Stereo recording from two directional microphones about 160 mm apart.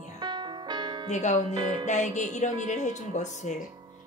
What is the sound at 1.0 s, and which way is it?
Speech, 50° left (ahead or behind).